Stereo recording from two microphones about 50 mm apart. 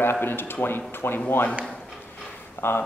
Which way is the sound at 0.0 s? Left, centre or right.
Left.